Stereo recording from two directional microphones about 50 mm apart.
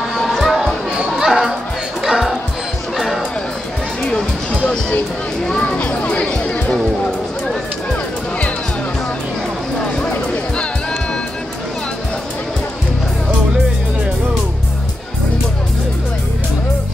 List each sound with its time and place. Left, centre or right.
0.2 s music: centre
0.9 s chatter: centre
2.0 s music: centre
4.0 s music: centre